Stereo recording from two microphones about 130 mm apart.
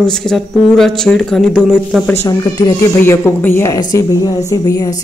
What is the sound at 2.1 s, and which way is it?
A woman's voice, 25° left (ahead or behind).